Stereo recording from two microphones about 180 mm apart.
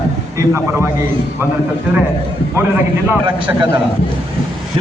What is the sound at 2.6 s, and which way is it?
Speech, 15° right (ahead or behind).